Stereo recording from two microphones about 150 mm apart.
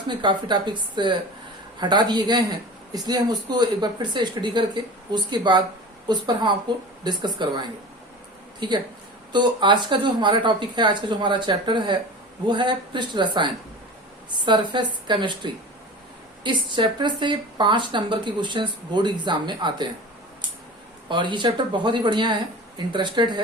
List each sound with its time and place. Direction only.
0.1 s speech: 30° right (ahead or behind)
16.4 s speech: 30° right (ahead or behind)
21.1 s speech: 30° right (ahead or behind)